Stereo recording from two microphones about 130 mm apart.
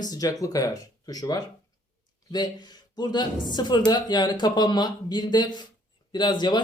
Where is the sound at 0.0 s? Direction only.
30° left (ahead or behind).